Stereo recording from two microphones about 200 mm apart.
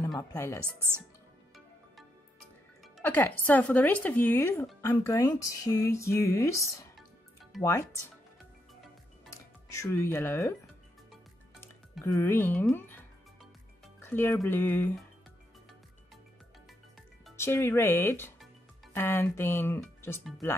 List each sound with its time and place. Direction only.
0.2 s speech: 15° left (ahead or behind)
3.0 s speech: 10° left (ahead or behind)
7.5 s speech: centre (ahead or behind)
9.3 s speech: 15° left (ahead or behind)
12.0 s speech: 15° left (ahead or behind)
14.0 s speech: 10° left (ahead or behind)
17.4 s speech: 10° left (ahead or behind)